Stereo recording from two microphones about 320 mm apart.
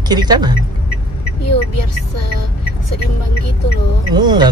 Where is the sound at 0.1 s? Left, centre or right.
Centre.